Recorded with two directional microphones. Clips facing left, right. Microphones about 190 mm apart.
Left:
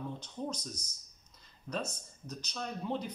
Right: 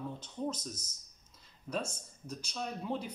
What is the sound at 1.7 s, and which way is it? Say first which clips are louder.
Speech: right 1 dB; 5° right (ahead or behind).